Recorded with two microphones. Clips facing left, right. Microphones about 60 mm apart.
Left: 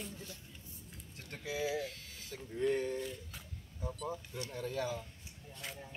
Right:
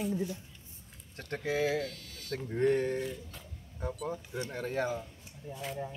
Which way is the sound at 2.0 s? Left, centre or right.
Centre.